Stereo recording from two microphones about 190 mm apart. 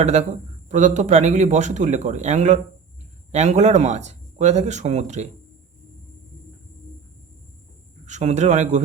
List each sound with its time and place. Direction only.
0.0 s speech: 35° right (ahead or behind)
8.0 s speech: 40° right (ahead or behind)